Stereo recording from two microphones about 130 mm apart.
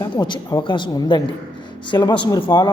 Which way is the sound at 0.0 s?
30° left (ahead or behind).